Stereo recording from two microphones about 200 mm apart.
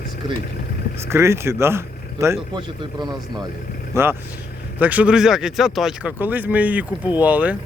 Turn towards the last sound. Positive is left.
turn(degrees=-5)  # may be behind; listen again after turning